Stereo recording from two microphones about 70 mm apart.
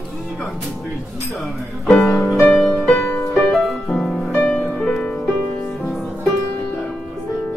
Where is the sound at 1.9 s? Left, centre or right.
Centre.